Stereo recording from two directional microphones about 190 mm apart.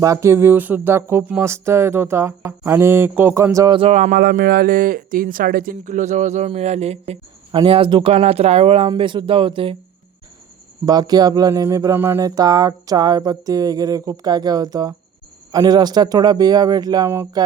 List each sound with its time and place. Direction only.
0.0 s speech: 15° right (ahead or behind)
3.9 s speech: 45° right (ahead or behind); by 9.7 s 25° right (ahead or behind)
10.8 s speech: 20° right (ahead or behind)